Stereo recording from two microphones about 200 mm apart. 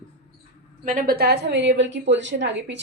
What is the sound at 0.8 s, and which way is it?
A woman's voice, 40° right (ahead or behind).